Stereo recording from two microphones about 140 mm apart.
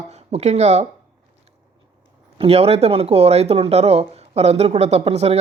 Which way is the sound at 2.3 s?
45° right (ahead or behind).